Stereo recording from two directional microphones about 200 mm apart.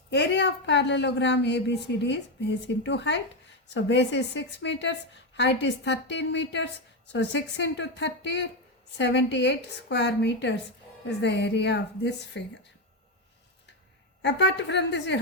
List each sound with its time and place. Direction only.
0.1 s a woman's voice: 60° left (ahead or behind)
14.2 s a woman's voice: 60° left (ahead or behind)